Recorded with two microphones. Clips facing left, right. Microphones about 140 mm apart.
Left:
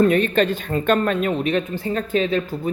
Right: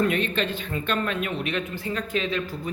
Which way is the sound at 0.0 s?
40° left (ahead or behind).